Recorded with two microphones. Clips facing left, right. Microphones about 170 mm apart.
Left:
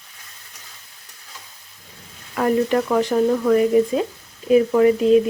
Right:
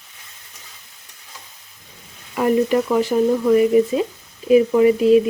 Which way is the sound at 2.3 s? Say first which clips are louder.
Right 1 dB; 10° right (ahead or behind).